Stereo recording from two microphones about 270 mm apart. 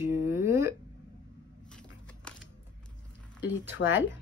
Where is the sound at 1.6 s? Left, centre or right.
Centre.